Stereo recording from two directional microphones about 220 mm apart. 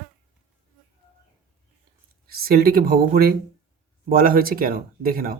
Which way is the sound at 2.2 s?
45° right (ahead or behind).